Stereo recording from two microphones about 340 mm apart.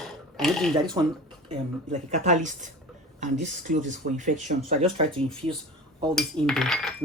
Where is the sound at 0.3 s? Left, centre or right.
Centre.